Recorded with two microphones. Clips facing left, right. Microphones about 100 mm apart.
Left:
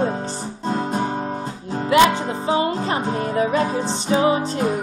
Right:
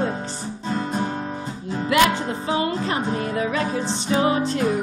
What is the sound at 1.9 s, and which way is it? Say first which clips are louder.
Music: left 4 dB; 25° left (ahead or behind).